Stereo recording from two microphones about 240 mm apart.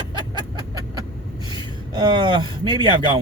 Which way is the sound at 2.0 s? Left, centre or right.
Centre.